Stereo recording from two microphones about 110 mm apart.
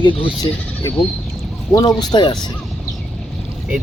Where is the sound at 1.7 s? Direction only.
40° left (ahead or behind).